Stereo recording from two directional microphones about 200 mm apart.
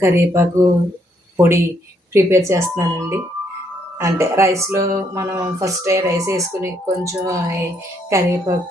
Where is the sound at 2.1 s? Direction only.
15° right (ahead or behind).